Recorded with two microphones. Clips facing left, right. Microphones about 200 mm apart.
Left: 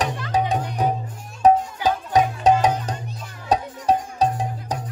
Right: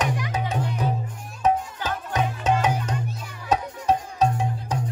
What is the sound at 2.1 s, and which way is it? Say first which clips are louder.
Music: left 5 dB; 35° left (ahead or behind).